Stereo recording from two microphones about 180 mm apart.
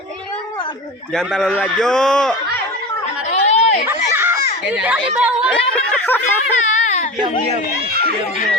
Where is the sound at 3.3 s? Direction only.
40° left (ahead or behind).